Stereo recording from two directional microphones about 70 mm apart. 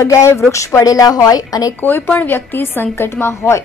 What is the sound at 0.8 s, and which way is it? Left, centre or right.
Speech, left.